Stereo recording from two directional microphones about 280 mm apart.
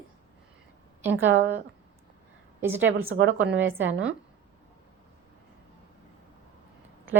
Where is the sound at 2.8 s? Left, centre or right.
Right.